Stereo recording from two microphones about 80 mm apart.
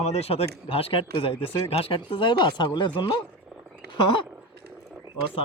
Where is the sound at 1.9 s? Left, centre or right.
Left.